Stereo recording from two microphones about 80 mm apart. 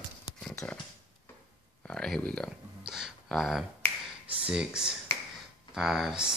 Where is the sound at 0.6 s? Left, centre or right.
Centre.